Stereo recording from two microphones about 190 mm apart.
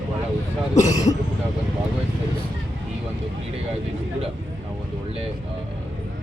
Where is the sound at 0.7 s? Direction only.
40° left (ahead or behind).